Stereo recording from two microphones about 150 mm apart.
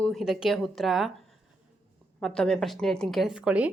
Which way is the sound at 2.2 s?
5° left (ahead or behind).